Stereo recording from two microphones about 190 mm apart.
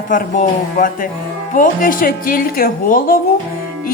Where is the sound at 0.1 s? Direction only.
45° left (ahead or behind).